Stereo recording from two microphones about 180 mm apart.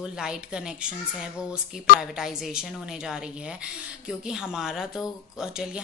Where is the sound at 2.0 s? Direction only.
5° right (ahead or behind).